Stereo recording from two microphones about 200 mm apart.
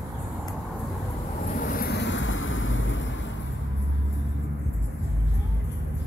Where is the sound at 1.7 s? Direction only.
50° left (ahead or behind); by 3.1 s 70° left (ahead or behind).